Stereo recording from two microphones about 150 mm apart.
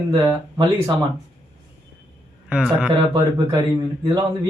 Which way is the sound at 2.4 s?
5° right (ahead or behind).